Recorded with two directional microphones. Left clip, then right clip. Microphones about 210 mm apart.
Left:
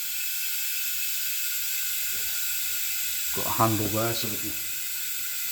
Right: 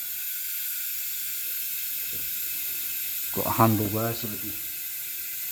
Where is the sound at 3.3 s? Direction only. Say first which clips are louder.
Right 2 dB; 50° right (ahead or behind).